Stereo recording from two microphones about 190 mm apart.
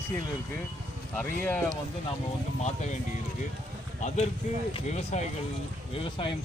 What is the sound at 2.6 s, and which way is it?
Speech, 35° left (ahead or behind).